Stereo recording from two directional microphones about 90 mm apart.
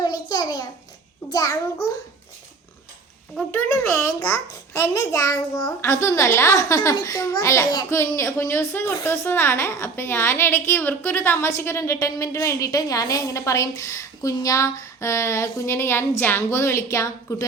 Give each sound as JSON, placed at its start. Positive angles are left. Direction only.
{"t": 0.0, "sound": "a sound", "side_deg": 45}
{"t": 1.3, "sound": "a woman's voice", "side_deg": 40}
{"t": 4.7, "sound": "a woman's voice", "side_deg": 35}